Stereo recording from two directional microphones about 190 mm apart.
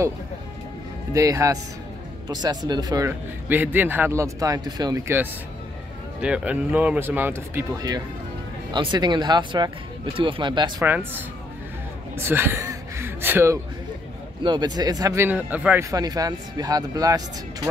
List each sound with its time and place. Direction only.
1.1 s a man's voice: 15° right (ahead or behind)
10.9 s a man's voice: 10° right (ahead or behind)
14.4 s a man's voice: 20° right (ahead or behind)